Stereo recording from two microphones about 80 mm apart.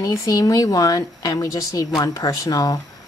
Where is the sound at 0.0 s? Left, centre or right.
Left.